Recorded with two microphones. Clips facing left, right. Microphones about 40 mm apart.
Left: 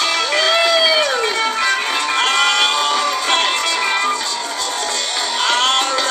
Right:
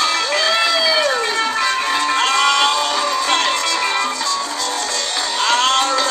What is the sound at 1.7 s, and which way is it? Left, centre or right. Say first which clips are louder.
Music: even; left.